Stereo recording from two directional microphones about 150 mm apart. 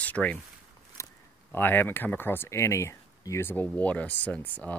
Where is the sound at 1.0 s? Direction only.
20° left (ahead or behind).